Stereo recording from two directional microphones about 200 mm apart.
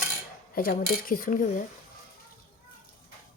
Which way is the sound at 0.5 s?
45° left (ahead or behind).